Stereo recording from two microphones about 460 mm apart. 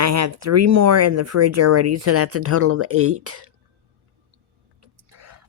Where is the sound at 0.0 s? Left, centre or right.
Right.